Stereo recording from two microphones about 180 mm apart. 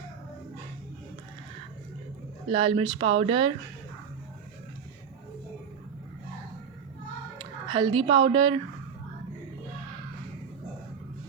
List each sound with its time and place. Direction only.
2.5 s speech: 30° right (ahead or behind)
7.3 s speech: 25° right (ahead or behind)